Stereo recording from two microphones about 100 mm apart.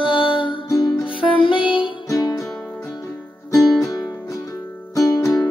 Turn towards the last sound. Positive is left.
turn(degrees=35)  # may be behind; listen again after turning